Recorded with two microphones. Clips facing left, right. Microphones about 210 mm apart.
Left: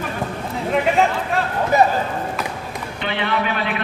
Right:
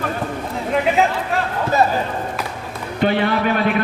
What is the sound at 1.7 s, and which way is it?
Run, 15° left (ahead or behind).